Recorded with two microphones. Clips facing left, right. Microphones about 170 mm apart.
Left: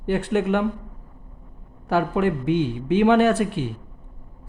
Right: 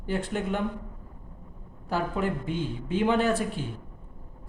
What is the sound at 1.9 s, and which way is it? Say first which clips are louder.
Speech: left 7 dB; 70° left (ahead or behind).